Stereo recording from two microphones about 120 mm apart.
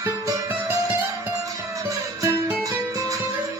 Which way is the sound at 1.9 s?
25° right (ahead or behind).